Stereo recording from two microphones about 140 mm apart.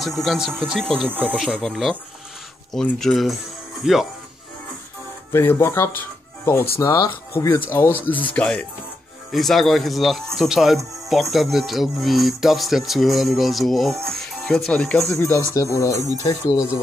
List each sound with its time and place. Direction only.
0.0 s speech: centre (ahead or behind)
5.3 s speech: 15° left (ahead or behind)
15.0 s speech: 20° left (ahead or behind)